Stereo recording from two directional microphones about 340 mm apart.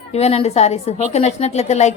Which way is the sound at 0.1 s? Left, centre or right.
Centre.